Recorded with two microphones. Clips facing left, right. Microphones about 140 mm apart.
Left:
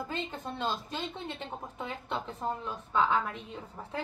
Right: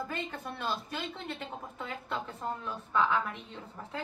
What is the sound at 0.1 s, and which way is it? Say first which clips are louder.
A woman's voice: left 1 dB; 20° left (ahead or behind).